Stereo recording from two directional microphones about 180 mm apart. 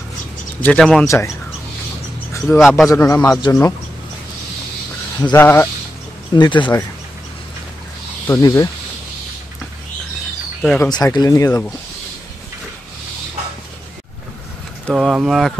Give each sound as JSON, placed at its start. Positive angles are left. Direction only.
{"t": 0.6, "sound": "speech", "side_deg": 5}
{"t": 1.0, "sound": "a man's voice", "side_deg": 15}
{"t": 2.3, "sound": "cricket", "side_deg": 15}
{"t": 2.9, "sound": "a man's voice", "side_deg": 15}
{"t": 5.3, "sound": "a man's voice", "side_deg": 10}
{"t": 6.3, "sound": "speech", "side_deg": 25}
{"t": 8.3, "sound": "speech", "side_deg": 20}
{"t": 10.6, "sound": "speech", "side_deg": 5}
{"t": 10.9, "sound": "speech", "side_deg": 20}
{"t": 14.9, "sound": "speech", "side_deg": 0}